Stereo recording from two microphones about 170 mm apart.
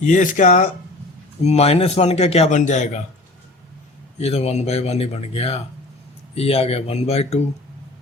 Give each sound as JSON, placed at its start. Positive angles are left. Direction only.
{"t": 0.1, "sound": "a man's voice", "side_deg": 50}
{"t": 4.2, "sound": "a man's voice", "side_deg": 40}